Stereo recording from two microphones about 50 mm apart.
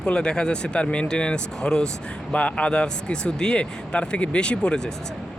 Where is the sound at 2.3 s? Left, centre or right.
Left.